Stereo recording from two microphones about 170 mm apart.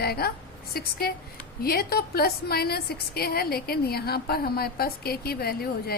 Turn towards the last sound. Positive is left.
turn(degrees=65)  # may be behind; listen again after turning